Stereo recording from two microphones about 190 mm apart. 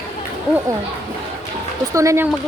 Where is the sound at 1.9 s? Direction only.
15° right (ahead or behind).